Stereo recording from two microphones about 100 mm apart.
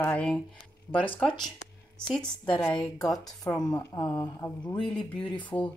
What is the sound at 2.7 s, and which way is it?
Speech, 40° left (ahead or behind).